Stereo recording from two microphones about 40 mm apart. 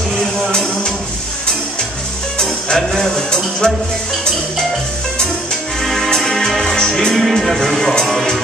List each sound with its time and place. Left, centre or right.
0.5 s music: left
2.3 s music: centre
5.8 s music: centre
7.2 s music: centre